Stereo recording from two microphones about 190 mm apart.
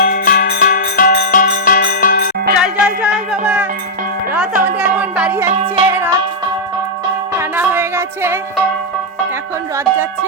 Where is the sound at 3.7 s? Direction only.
45° right (ahead or behind).